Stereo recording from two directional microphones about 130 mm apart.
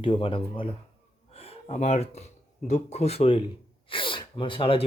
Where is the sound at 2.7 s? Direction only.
55° left (ahead or behind).